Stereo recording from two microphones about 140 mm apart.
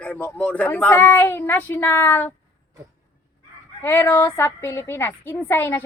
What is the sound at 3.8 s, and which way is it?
A woman's voice, 15° left (ahead or behind).